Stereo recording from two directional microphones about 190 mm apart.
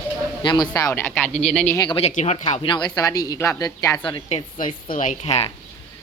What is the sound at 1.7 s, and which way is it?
Speech, 25° left (ahead or behind).